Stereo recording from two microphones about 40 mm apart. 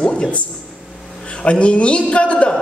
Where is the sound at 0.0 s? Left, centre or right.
Centre.